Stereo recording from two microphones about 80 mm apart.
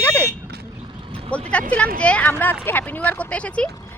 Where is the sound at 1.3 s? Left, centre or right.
Centre.